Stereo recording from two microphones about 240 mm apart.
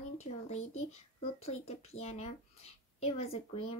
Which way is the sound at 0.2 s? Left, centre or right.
Left.